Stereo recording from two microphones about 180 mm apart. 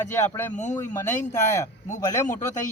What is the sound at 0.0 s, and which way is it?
Speech, 15° left (ahead or behind).